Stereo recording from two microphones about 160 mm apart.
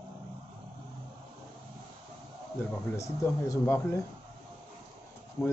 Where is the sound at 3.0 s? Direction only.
20° left (ahead or behind).